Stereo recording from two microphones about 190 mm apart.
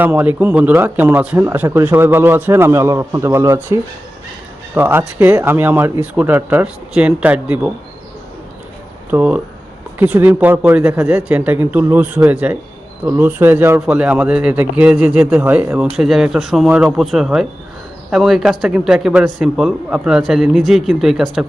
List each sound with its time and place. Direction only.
0.0 s speech: 10° right (ahead or behind)
9.0 s a man's voice: 5° right (ahead or behind)